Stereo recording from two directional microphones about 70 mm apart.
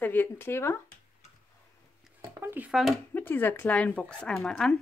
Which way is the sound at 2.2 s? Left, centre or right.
Right.